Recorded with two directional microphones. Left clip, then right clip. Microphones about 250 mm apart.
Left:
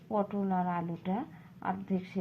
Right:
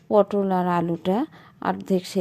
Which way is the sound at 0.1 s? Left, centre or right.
Right.